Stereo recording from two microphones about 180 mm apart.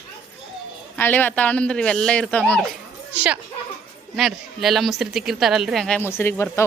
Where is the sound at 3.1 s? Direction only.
5° right (ahead or behind).